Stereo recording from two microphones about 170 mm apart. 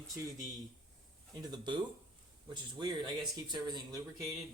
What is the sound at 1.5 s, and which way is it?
Speech, 25° right (ahead or behind).